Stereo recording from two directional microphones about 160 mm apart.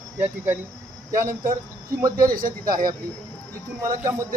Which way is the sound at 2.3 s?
60° right (ahead or behind).